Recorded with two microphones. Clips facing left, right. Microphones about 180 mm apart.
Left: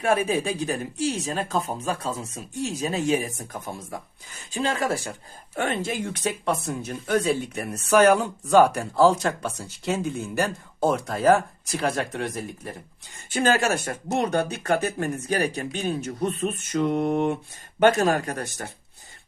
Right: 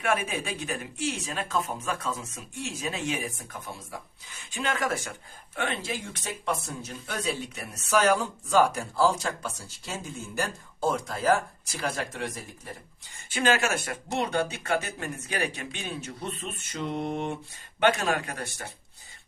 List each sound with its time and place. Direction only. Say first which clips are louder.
0.0 s speech: left 6 dB; 35° left (ahead or behind)
5.5 s speech: left 5 dB; 45° left (ahead or behind)
13.3 s speech: left 4 dB; 40° left (ahead or behind)
17.7 s speech: left 6 dB; 45° left (ahead or behind)